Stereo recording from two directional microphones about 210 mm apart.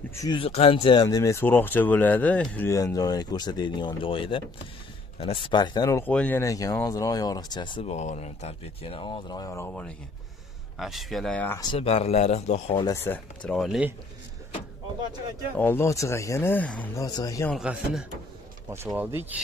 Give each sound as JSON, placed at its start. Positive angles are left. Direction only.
{"t": 0.1, "sound": "speech", "side_deg": 20}
{"t": 11.7, "sound": "speech", "side_deg": 30}
{"t": 15.5, "sound": "speech", "side_deg": 10}
{"t": 17.6, "sound": "speech", "side_deg": -5}